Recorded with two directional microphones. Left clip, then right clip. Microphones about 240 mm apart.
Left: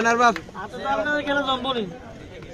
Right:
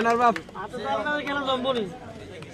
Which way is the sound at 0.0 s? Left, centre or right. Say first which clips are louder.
Left 3 dB; left.